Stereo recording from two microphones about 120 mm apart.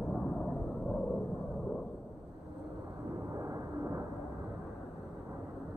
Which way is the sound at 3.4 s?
25° right (ahead or behind).